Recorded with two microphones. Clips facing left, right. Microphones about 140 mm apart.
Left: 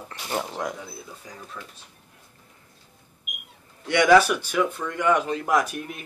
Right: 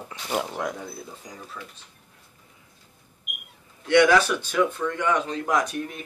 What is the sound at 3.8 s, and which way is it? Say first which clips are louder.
Speech: left 1 dB; 10° left (ahead or behind).